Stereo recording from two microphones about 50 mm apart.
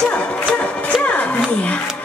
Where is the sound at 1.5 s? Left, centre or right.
Left.